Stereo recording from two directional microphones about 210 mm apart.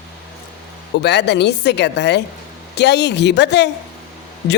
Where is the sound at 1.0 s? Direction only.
55° left (ahead or behind).